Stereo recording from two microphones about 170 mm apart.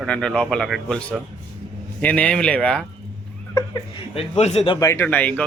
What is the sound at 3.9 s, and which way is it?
Speech, 35° left (ahead or behind).